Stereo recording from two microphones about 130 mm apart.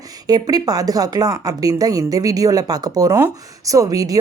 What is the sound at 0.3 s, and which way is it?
A woman's voice, 30° right (ahead or behind).